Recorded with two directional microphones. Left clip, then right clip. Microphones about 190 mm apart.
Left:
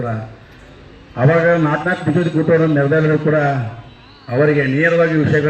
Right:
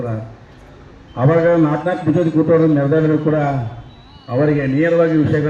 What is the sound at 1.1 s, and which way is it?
A man's voice, 35° left (ahead or behind).